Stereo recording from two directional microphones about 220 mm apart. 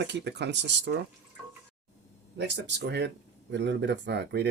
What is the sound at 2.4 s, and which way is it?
Speech, 50° right (ahead or behind).